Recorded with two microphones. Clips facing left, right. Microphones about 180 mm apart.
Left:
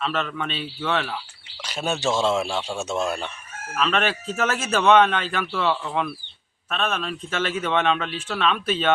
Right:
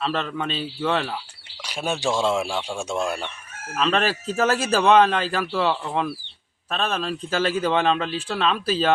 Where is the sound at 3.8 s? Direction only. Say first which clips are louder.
Right 1 dB; 35° right (ahead or behind).